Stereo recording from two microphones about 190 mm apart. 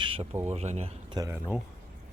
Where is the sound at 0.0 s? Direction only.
30° right (ahead or behind).